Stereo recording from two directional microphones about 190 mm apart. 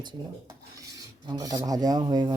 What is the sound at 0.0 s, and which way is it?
Filing, 20° right (ahead or behind).